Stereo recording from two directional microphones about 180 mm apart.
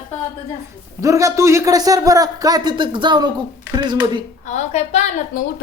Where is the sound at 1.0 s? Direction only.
15° right (ahead or behind).